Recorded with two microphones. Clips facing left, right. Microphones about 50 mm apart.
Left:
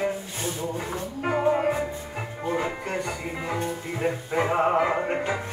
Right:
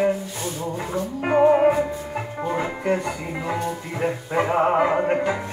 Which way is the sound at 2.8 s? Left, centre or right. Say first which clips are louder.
Right 7 dB; right.